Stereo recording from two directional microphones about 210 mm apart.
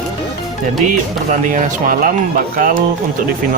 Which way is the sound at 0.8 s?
40° right (ahead or behind).